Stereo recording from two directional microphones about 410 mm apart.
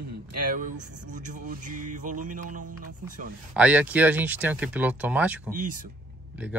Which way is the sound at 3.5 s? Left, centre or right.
Centre.